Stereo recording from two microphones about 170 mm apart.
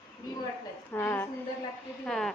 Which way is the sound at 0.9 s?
10° left (ahead or behind).